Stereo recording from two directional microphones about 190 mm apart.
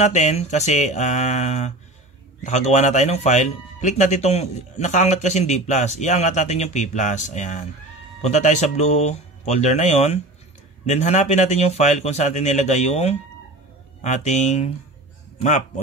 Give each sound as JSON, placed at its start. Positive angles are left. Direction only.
{"t": 0.0, "sound": "speech", "side_deg": 35}